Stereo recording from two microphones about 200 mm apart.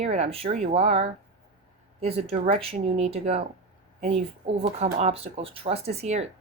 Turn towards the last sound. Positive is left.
turn(degrees=-30)  # may be behind; listen again after turning